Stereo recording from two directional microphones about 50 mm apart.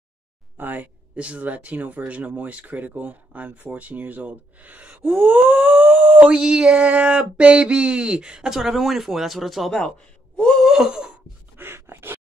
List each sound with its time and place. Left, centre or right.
0.6 s speech: right
1.1 s a sound: right
3.7 s speech: right
5.9 s speech: centre
6.1 s a sound: centre
8.5 s speech: centre
10.3 s a sound: centre
10.6 s groan: centre
11.5 s gasp: right